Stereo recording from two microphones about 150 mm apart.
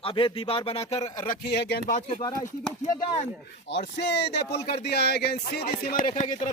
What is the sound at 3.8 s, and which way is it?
Speech, 90° left.